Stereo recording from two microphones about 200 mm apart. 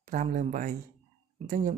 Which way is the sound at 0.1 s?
40° right (ahead or behind).